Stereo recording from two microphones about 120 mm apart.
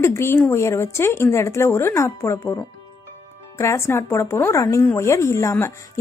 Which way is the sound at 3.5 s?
25° left (ahead or behind).